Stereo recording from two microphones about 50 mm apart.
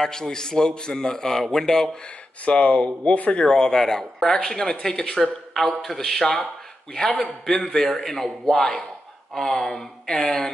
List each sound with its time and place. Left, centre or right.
0.0 s a man's voice: centre
2.4 s a man's voice: left; by 6.4 s centre
7.1 s speech: left
7.4 s a man's voice: centre